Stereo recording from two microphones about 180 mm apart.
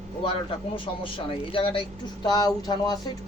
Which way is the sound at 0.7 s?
30° left (ahead or behind).